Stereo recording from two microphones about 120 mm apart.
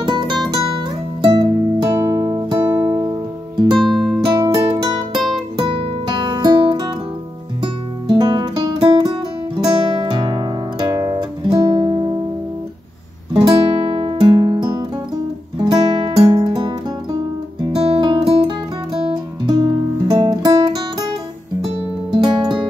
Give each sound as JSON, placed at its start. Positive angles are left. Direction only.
{"t": 0.0, "sound": "music", "side_deg": -40}
{"t": 2.9, "sound": "music", "side_deg": -35}
{"t": 3.9, "sound": "music", "side_deg": 0}
{"t": 4.2, "sound": "music", "side_deg": -50}
{"t": 5.1, "sound": "music", "side_deg": 0}
{"t": 5.6, "sound": "music", "side_deg": -40}
{"t": 13.3, "sound": "music", "side_deg": -45}
{"t": 22.1, "sound": "music", "side_deg": -40}